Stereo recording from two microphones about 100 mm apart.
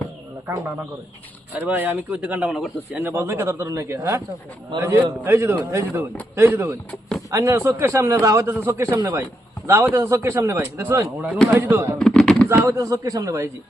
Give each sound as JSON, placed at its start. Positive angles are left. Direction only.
{"t": 0.5, "sound": "a man's voice", "side_deg": -20}
{"t": 2.5, "sound": "a man's voice", "side_deg": 0}
{"t": 3.0, "sound": "a man's voice", "side_deg": -25}
{"t": 8.9, "sound": "a man's voice", "side_deg": -35}
{"t": 11.9, "sound": "a sound", "side_deg": 5}
{"t": 12.5, "sound": "speech", "side_deg": -30}